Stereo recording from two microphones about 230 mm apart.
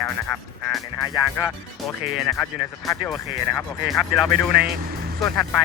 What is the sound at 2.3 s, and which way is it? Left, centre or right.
Speech, centre.